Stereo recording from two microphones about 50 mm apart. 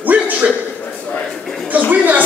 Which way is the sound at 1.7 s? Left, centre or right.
Right.